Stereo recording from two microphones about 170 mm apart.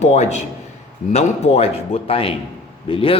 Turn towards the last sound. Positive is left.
turn(degrees=30)  # may be behind; listen again after turning